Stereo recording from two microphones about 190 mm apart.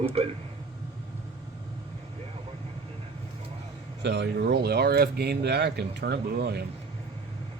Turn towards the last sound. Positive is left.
turn(degrees=-60)  # may be behind; listen again after turning